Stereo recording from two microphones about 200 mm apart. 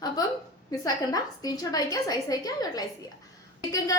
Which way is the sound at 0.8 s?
20° left (ahead or behind).